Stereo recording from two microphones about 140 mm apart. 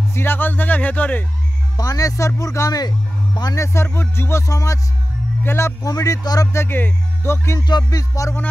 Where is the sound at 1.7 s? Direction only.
25° left (ahead or behind).